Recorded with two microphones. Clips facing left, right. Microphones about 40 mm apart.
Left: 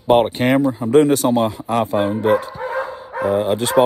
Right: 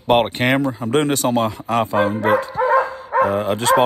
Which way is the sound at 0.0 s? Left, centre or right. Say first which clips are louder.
Left 2 dB; right.